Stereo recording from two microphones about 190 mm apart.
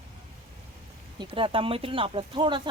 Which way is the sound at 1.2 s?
25° right (ahead or behind).